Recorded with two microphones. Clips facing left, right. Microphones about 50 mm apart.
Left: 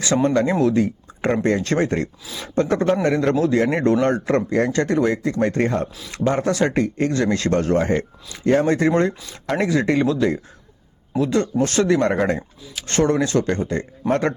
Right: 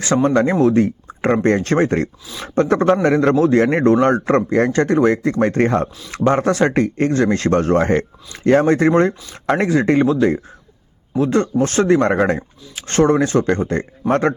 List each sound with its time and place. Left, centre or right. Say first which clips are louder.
0.0 s a man's voice: right 3 dB; right